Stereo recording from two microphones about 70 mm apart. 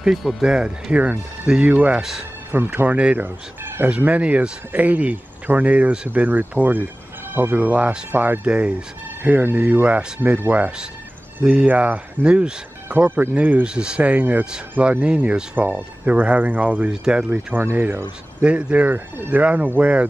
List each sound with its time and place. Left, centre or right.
0.0 s speech: centre
2.5 s speech: right
8.5 s speech: centre
16.9 s speech: centre
17.3 s speech: right